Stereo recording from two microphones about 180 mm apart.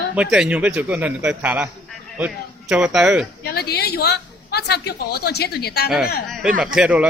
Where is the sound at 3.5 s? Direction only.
60° left (ahead or behind).